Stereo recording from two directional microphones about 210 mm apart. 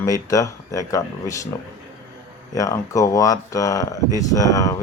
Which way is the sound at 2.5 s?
15° left (ahead or behind).